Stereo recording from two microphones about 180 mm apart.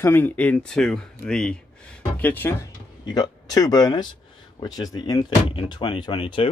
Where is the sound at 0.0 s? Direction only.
10° left (ahead or behind).